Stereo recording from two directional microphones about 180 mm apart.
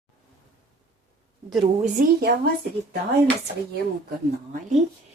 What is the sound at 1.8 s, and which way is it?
Speech, 55° right (ahead or behind).